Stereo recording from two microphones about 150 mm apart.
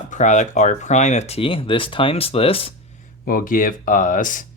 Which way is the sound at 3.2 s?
75° left (ahead or behind).